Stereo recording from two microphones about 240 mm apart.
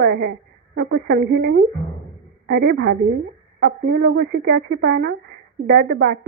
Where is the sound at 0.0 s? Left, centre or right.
Right.